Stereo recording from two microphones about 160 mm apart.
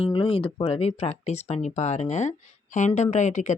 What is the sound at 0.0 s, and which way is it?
Speech, 35° left (ahead or behind).